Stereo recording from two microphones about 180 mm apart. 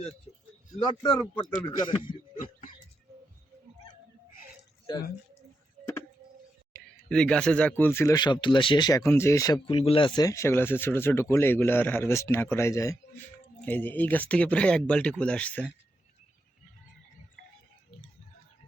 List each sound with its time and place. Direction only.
0.9 s a man's voice: 25° left (ahead or behind)
2.4 s a sound: 45° left (ahead or behind)
7.1 s speech: 5° left (ahead or behind)
9.6 s speech: 30° left (ahead or behind); by 15.7 s 10° left (ahead or behind)